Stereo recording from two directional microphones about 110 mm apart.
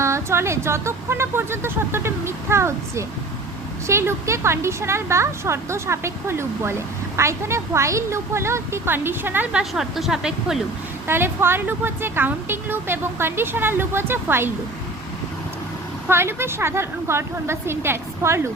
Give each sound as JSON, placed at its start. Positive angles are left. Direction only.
{"t": 0.0, "sound": "speech", "side_deg": -25}
{"t": 9.5, "sound": "speech", "side_deg": -5}
{"t": 11.0, "sound": "speech", "side_deg": -20}
{"t": 16.0, "sound": "speech", "side_deg": -20}